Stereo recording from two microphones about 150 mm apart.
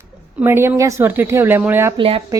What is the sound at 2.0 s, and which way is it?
Speech, 35° right (ahead or behind).